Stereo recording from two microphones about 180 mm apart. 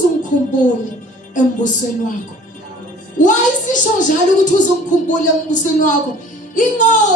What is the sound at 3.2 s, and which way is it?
Speech, 45° left (ahead or behind).